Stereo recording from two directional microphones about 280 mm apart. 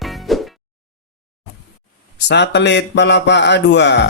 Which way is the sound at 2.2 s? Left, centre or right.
Left.